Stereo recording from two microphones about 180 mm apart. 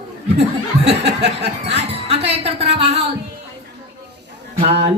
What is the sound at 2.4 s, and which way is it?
Speech, 35° right (ahead or behind).